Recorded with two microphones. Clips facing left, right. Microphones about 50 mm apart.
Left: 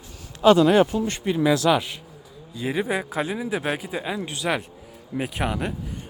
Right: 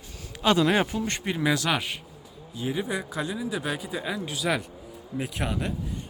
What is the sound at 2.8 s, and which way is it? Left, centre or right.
Speech, left.